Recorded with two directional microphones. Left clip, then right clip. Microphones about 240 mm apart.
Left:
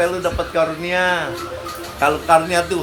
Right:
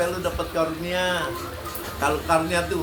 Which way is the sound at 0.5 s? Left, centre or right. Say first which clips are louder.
Left 7 dB; left.